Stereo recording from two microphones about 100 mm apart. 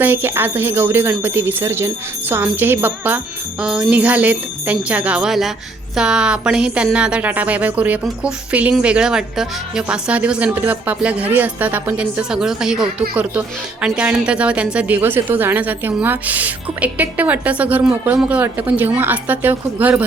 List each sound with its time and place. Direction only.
0.0 s jingle bell: 20° right (ahead or behind)
3.6 s a woman's voice: 10° right (ahead or behind)
12.3 s a woman's voice: 5° right (ahead or behind)